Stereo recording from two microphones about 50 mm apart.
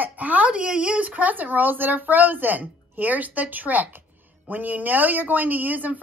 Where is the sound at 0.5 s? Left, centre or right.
Right.